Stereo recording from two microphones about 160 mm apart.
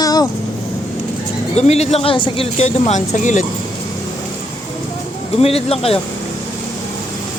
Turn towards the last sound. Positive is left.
turn(degrees=40)  # may be behind; listen again after turning